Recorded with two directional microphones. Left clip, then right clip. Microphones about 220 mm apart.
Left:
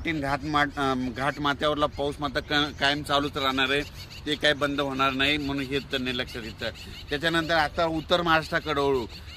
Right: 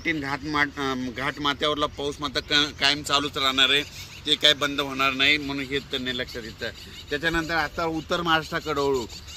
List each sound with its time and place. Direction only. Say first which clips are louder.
0.0 s speech: right 1 dB; 50° left (ahead or behind); by 6.7 s 35° left (ahead or behind)
7.1 s speech: even; 20° left (ahead or behind); by 9.0 s 5° left (ahead or behind)